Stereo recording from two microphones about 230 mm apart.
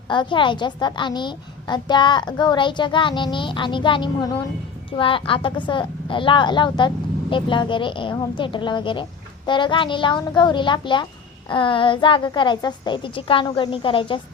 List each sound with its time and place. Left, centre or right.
0.1 s a woman's voice: centre